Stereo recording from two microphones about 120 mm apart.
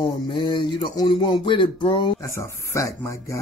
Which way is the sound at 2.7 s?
25° left (ahead or behind).